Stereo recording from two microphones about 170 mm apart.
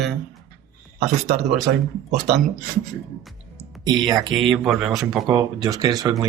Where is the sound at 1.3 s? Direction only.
Centre (ahead or behind).